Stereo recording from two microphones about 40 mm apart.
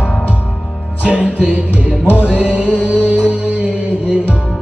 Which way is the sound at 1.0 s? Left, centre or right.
Right.